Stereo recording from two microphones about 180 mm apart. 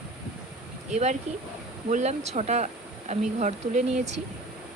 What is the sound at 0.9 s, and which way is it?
Speech, 40° right (ahead or behind).